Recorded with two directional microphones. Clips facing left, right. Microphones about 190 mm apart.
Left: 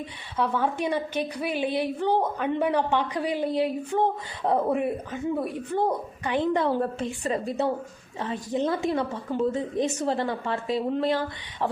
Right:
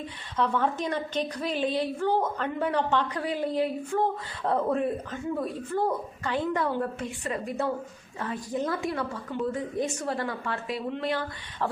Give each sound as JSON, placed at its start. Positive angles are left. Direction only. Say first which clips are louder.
{"t": 0.3, "sound": "a woman's voice", "louder": "left 1 dB", "side_deg": 10}